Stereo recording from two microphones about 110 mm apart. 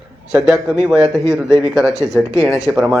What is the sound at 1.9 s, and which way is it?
Speech, 30° left (ahead or behind).